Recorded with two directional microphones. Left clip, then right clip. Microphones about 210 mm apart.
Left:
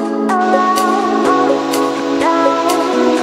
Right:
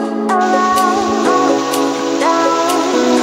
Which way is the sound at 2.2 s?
Centre (ahead or behind).